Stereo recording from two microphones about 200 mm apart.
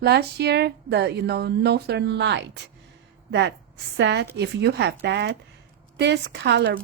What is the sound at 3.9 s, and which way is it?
A woman's voice, 60° right (ahead or behind).